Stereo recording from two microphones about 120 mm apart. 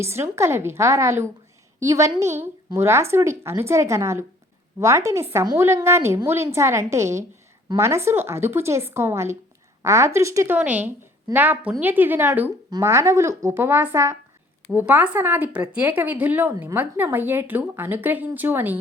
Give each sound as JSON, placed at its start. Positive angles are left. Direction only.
{"t": 0.0, "sound": "a woman's voice", "side_deg": -20}